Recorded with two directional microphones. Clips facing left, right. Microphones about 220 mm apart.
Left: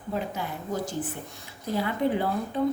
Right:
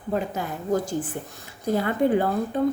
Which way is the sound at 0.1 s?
45° right (ahead or behind).